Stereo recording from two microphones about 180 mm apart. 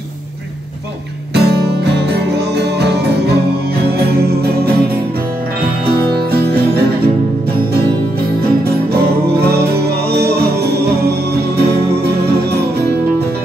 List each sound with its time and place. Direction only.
1.3 s music: 65° right (ahead or behind)
8.4 s music: 60° right (ahead or behind)